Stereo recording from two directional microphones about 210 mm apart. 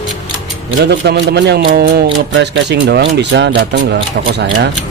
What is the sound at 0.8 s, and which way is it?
Speech, 55° right (ahead or behind).